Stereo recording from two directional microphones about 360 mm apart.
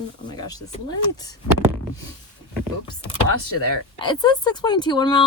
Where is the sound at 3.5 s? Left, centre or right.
Left.